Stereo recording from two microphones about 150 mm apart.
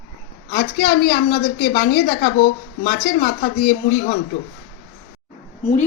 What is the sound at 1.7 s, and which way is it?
Speech, 75° left (ahead or behind).